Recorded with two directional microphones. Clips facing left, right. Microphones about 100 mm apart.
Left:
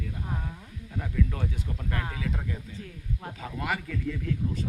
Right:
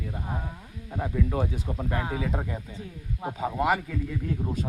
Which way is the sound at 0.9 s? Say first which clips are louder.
Right 4 dB; 30° right (ahead or behind).